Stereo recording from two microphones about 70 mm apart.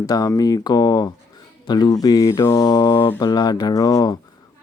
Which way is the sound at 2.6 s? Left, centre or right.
Left.